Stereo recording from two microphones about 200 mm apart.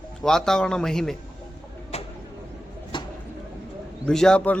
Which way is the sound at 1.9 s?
30° left (ahead or behind).